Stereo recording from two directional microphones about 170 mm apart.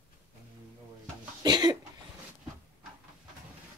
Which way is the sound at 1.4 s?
25° right (ahead or behind).